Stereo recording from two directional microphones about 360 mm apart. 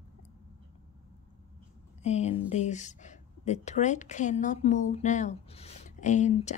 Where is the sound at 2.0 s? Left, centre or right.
Centre.